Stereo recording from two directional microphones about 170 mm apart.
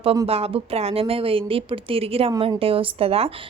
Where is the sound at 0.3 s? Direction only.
35° right (ahead or behind).